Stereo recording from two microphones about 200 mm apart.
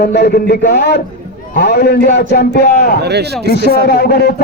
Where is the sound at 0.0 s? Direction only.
55° left (ahead or behind).